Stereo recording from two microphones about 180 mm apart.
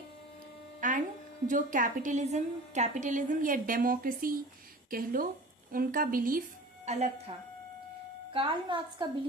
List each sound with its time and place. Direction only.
0.8 s electric shaver: 45° right (ahead or behind)
1.5 s a woman's voice: 45° right (ahead or behind)
6.8 s a woman's voice: 40° right (ahead or behind)
8.3 s a woman's voice: 25° right (ahead or behind)